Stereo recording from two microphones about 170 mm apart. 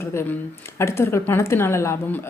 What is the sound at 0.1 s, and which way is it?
Speech, 15° left (ahead or behind).